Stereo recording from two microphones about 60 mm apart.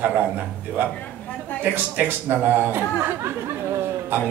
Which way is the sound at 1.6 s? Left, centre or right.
Right.